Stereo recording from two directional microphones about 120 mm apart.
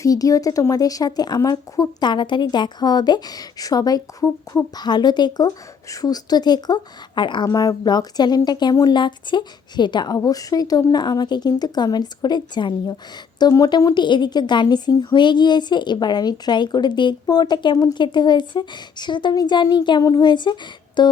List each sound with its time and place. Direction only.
0.0 s speech: 30° left (ahead or behind)